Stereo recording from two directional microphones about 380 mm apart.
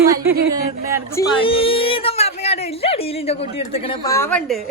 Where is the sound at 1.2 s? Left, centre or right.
Centre.